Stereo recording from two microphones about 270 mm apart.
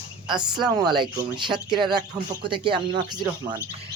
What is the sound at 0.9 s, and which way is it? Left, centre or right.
Speech, centre.